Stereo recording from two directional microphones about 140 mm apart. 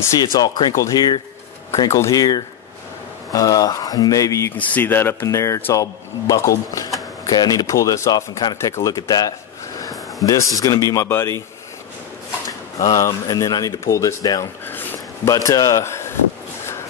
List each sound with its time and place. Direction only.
0.2 s speech: 30° left (ahead or behind)
12.8 s speech: 25° left (ahead or behind)
14.7 s a sound: 20° left (ahead or behind)